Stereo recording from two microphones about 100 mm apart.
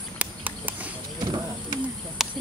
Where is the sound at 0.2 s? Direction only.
15° right (ahead or behind).